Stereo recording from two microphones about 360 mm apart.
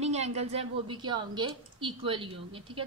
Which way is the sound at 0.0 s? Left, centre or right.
Centre.